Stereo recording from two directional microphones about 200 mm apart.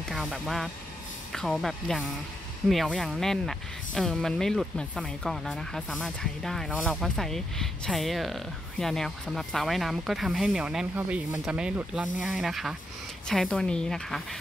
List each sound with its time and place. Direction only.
0.0 s speech: centre (ahead or behind)